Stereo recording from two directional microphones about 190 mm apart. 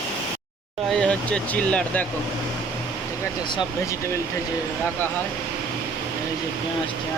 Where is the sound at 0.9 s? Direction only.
5° left (ahead or behind).